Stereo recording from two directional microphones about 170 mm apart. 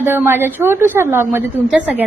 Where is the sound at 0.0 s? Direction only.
10° right (ahead or behind).